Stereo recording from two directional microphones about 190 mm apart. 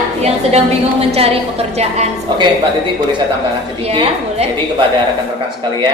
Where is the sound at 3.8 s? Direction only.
30° right (ahead or behind).